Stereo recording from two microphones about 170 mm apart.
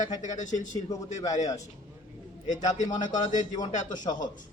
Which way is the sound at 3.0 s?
45° left (ahead or behind).